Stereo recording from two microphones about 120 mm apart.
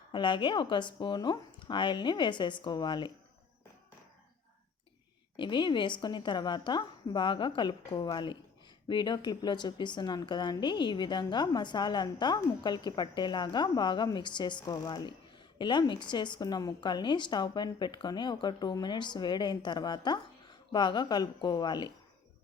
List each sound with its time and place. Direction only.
0.1 s a woman's voice: 40° left (ahead or behind)
5.4 s a woman's voice: 40° left (ahead or behind)